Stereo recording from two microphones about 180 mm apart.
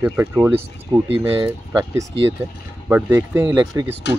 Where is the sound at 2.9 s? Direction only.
10° right (ahead or behind).